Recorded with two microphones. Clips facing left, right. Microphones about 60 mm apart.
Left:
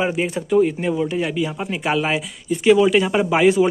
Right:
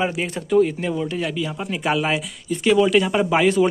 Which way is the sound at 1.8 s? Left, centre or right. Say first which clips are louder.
Left 1 dB; centre.